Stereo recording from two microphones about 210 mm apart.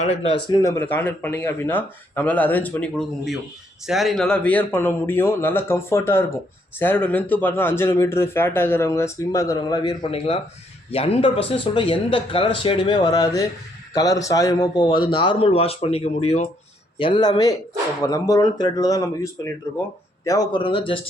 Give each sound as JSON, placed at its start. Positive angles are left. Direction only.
{"t": 0.0, "sound": "a man's voice", "side_deg": 30}
{"t": 0.4, "sound": "a man's voice", "side_deg": 15}